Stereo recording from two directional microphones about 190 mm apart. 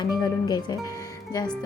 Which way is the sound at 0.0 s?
20° left (ahead or behind).